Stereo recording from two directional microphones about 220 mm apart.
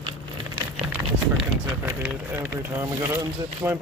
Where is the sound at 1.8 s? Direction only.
10° right (ahead or behind).